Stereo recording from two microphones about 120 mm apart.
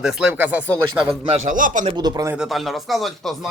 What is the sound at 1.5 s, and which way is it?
Speech, 90° right.